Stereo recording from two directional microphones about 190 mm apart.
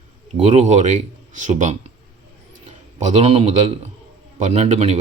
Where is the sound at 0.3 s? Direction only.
35° right (ahead or behind).